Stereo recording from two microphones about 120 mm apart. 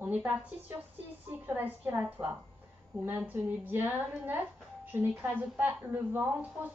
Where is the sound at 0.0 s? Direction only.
15° right (ahead or behind).